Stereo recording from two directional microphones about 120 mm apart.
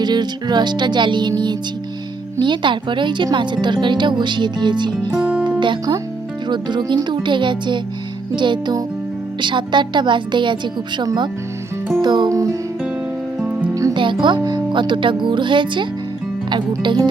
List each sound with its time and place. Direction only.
0.0 s a woman's voice: 35° right (ahead or behind)
2.4 s a woman's voice: 40° right (ahead or behind)
5.3 s music: 10° right (ahead or behind)
5.5 s music: 35° right (ahead or behind)
6.5 s a woman's voice: 40° right (ahead or behind)
12.3 s speech: 25° right (ahead or behind)
13.4 s music: 10° right (ahead or behind)
13.9 s a woman's voice: 45° right (ahead or behind)